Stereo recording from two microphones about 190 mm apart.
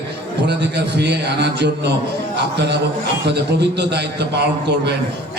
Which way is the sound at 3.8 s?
65° right (ahead or behind).